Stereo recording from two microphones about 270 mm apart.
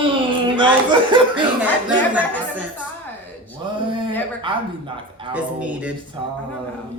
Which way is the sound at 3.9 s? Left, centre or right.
Centre.